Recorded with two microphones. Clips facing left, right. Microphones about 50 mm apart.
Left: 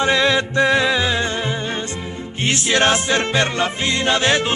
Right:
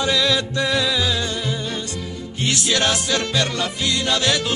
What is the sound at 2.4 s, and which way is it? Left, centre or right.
Music, left.